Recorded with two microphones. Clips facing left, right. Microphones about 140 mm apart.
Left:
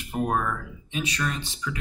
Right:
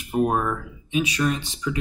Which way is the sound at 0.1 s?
20° right (ahead or behind).